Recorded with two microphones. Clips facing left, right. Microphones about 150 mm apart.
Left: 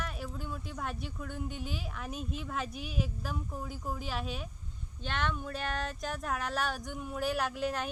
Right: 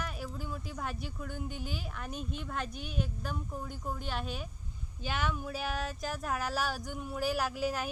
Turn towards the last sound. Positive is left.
turn(degrees=-5)  # may be behind; listen again after turning